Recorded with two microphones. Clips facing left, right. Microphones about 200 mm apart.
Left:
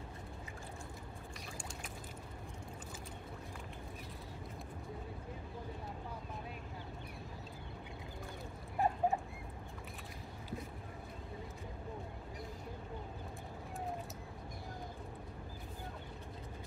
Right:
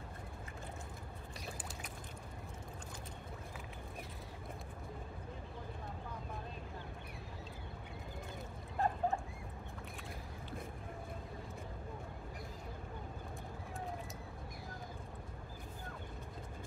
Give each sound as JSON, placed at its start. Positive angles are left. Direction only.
{"t": 8.7, "sound": "dog", "side_deg": 15}